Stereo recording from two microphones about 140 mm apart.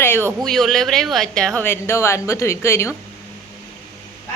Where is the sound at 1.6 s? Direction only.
20° left (ahead or behind).